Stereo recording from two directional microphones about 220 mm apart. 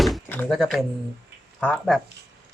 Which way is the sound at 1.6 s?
5° left (ahead or behind).